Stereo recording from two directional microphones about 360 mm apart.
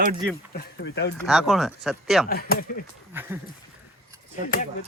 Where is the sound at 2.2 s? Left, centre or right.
Left.